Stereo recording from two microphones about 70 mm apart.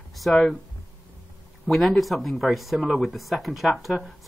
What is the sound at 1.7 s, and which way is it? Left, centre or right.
Speech, centre.